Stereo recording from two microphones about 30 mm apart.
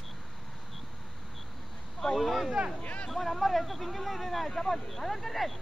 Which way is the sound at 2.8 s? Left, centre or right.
Left.